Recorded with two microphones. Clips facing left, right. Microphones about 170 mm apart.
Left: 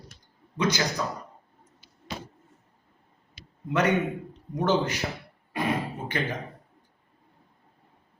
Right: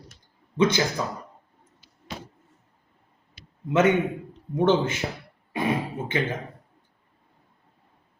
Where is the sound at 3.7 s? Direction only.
25° right (ahead or behind).